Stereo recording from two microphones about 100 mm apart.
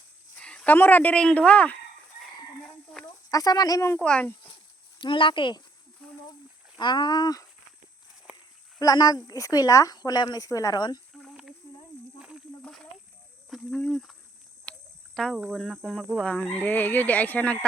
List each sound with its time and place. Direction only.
0.3 s speech: 10° left (ahead or behind)
2.9 s a sound: 10° left (ahead or behind)
3.2 s a woman's voice: 40° left (ahead or behind)
4.0 s speech: 10° left (ahead or behind)
4.9 s speech: 55° left (ahead or behind)
6.7 s speech: 50° left (ahead or behind)
8.8 s a woman's voice: 40° left (ahead or behind)
11.2 s a sound: centre (ahead or behind)
13.5 s speech: 5° left (ahead or behind)
14.6 s a sound: 10° left (ahead or behind)
15.4 s speech: 5° left (ahead or behind)